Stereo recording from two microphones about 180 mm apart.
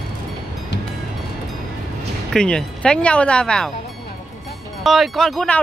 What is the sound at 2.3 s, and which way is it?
Speech, 5° left (ahead or behind).